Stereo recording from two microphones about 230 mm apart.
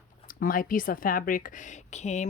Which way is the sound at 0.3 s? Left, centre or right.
Left.